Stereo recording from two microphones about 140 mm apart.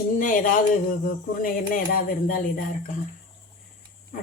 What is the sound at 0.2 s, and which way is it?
Speech, 70° left (ahead or behind).